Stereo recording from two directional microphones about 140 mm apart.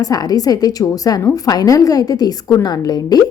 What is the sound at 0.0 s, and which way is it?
A woman's voice, 25° left (ahead or behind).